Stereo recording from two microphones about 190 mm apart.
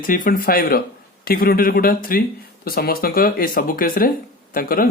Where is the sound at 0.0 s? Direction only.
45° left (ahead or behind).